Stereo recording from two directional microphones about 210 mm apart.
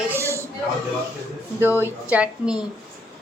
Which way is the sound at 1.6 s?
10° right (ahead or behind).